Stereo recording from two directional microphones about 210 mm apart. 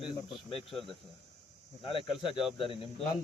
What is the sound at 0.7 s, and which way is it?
Speech, centre (ahead or behind).